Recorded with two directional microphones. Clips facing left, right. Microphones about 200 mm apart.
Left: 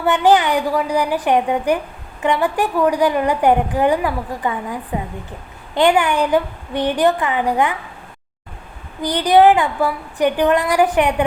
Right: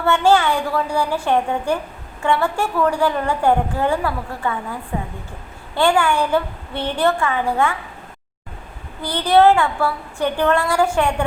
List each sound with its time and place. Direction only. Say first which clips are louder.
0.0 s a woman's voice: left 1 dB; 15° left (ahead or behind)
9.0 s a woman's voice: left 2 dB; 15° left (ahead or behind)